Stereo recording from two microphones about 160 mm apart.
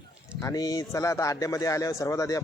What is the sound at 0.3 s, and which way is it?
Speech, 20° left (ahead or behind).